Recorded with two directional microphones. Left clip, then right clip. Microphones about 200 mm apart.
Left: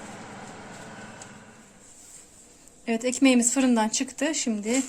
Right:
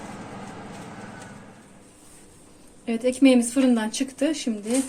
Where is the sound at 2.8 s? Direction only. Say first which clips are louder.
Right 3 dB; 45° left (ahead or behind).